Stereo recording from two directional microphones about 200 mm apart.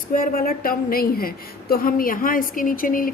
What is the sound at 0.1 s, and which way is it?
A woman's voice, 45° left (ahead or behind).